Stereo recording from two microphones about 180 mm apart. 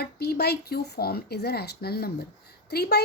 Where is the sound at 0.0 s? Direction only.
60° left (ahead or behind).